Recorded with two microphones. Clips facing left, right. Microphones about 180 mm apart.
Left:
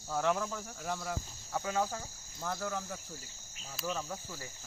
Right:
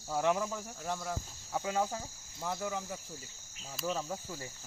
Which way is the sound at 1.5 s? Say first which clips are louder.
Right 1 dB; 15° right (ahead or behind).